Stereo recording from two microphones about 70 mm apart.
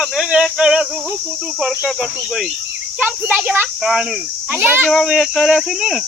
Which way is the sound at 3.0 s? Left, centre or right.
Right.